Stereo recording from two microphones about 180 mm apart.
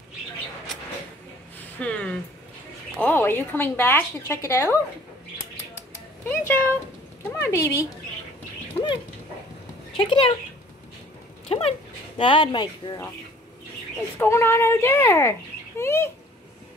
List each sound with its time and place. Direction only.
1.8 s a woman's voice: 5° left (ahead or behind)
6.2 s a woman's voice: 10° left (ahead or behind)
8.8 s dog: 10° left (ahead or behind)
9.9 s speech: 30° left (ahead or behind)
11.4 s speech: 35° left (ahead or behind)
14.1 s a woman's voice: 15° left (ahead or behind)